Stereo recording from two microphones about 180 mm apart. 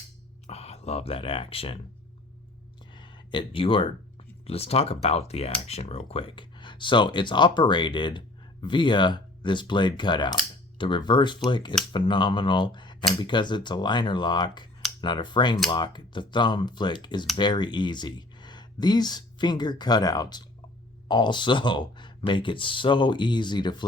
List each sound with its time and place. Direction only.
0.4 s speech: 35° left (ahead or behind)
2.9 s a sound: 25° left (ahead or behind)
4.4 s speech: 35° left (ahead or behind)